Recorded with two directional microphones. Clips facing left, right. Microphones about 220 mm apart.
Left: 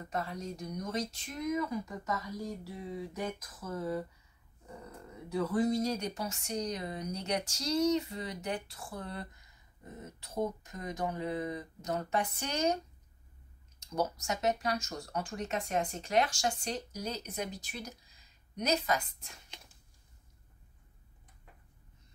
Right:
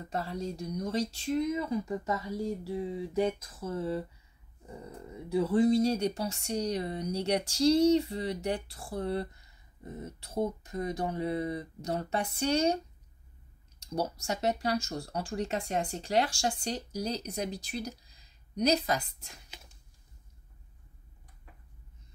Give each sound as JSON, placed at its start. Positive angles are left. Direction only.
{"t": 0.1, "sound": "speech", "side_deg": -30}
{"t": 5.3, "sound": "speech", "side_deg": -30}
{"t": 10.6, "sound": "speech", "side_deg": -30}
{"t": 13.7, "sound": "speech", "side_deg": -30}